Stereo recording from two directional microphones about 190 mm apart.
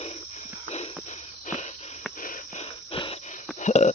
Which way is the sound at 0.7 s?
35° left (ahead or behind).